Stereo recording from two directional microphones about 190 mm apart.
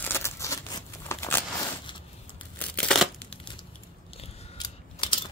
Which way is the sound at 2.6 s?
5° left (ahead or behind).